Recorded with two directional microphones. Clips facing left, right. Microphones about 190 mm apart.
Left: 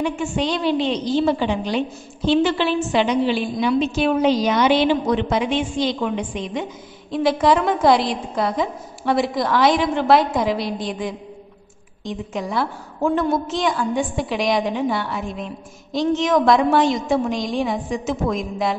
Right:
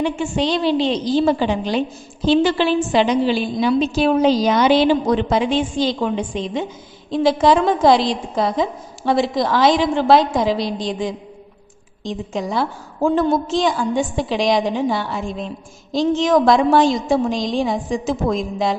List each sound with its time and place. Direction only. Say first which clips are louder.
0.0 s a woman's voice: right 2 dB; 30° right (ahead or behind)
10.6 s a woman's voice: right 3 dB; 90° right
12.1 s a woman's voice: right 2 dB; 25° right (ahead or behind)